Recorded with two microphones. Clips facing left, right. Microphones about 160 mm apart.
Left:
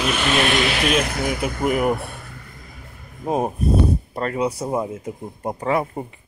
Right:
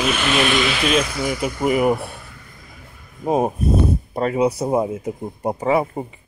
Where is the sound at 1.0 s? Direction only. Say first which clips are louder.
Even; 50° left (ahead or behind).